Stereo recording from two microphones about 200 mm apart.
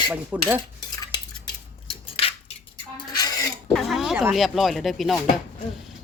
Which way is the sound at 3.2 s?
20° left (ahead or behind).